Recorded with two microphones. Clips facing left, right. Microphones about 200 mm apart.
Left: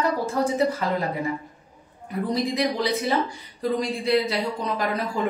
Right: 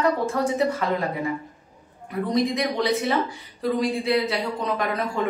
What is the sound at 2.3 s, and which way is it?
A woman's voice, centre (ahead or behind).